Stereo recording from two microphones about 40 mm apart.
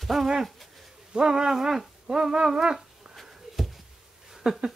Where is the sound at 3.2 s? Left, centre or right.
Centre.